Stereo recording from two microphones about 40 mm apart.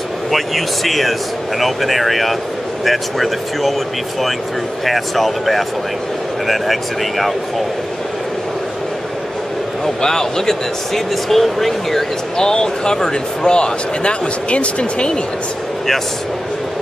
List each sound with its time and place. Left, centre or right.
0.3 s speech: centre
4.8 s speech: centre
10.0 s a man's voice: centre
12.4 s speech: centre